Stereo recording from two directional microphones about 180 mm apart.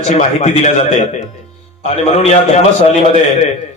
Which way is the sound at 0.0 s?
40° left (ahead or behind).